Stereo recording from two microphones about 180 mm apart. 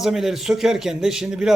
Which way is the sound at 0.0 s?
Centre (ahead or behind).